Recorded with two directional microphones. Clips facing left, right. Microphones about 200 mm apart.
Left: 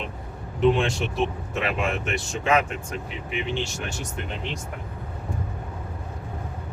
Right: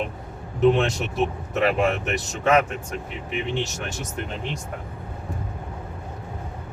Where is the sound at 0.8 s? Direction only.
40° right (ahead or behind).